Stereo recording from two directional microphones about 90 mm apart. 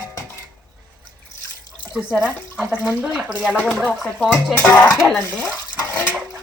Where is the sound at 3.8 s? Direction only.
10° left (ahead or behind).